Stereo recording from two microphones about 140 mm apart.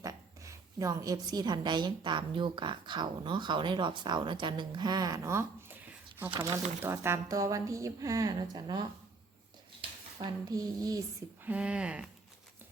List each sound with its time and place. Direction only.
0.0 s a woman's voice: 25° right (ahead or behind)
10.5 s speech: 25° right (ahead or behind)
11.4 s speech: 10° right (ahead or behind)